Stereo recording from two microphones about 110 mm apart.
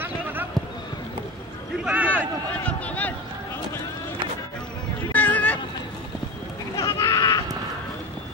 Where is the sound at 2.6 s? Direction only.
15° left (ahead or behind).